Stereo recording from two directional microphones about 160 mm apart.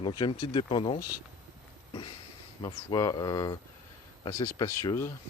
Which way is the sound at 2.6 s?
25° left (ahead or behind).